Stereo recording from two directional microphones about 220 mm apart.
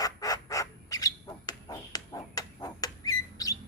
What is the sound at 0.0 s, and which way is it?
Bird, 15° left (ahead or behind).